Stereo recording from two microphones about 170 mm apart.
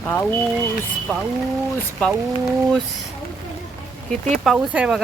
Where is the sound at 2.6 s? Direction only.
5° left (ahead or behind).